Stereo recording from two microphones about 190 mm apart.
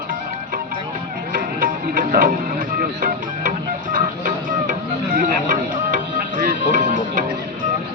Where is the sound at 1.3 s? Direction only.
45° right (ahead or behind).